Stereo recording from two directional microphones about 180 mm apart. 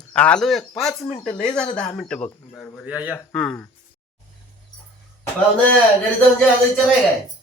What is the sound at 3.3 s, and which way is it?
Speech, 5° left (ahead or behind).